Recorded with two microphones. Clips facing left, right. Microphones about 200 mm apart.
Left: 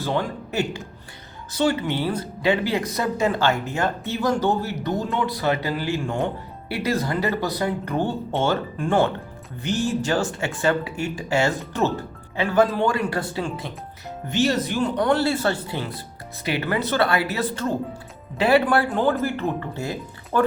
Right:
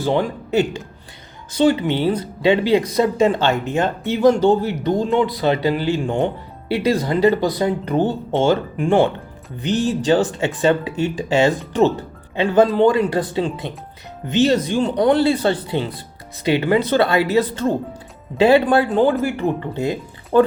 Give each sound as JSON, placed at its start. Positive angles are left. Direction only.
{"t": 0.0, "sound": "speech", "side_deg": -20}